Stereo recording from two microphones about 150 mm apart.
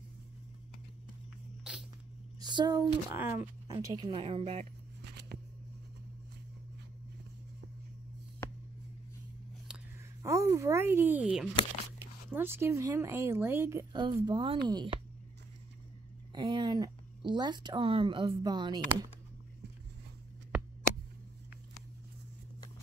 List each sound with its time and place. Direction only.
1.6 s a sound: 5° right (ahead or behind)
2.4 s speech: 30° right (ahead or behind)
3.2 s speech: 15° right (ahead or behind)
3.8 s speech: 25° right (ahead or behind)
5.3 s a sound: 90° right
9.7 s a sound: 5° right (ahead or behind)
10.2 s speech: 20° right (ahead or behind)
13.9 s speech: 30° right (ahead or behind)
16.3 s speech: 30° right (ahead or behind)